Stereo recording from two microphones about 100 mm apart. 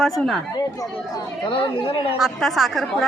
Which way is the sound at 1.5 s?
60° left (ahead or behind).